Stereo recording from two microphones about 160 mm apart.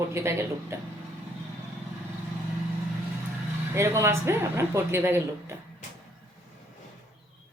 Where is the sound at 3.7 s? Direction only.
15° right (ahead or behind).